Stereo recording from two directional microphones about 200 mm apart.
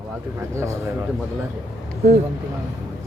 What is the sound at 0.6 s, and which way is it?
Speech, 15° right (ahead or behind).